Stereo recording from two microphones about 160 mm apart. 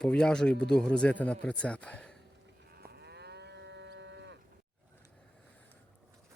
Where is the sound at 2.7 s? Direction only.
80° right.